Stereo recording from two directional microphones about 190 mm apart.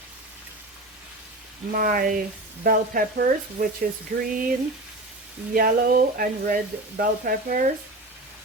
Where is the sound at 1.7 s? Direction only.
50° right (ahead or behind).